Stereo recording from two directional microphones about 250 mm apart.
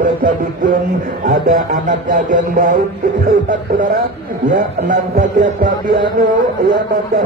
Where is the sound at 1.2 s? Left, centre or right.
Right.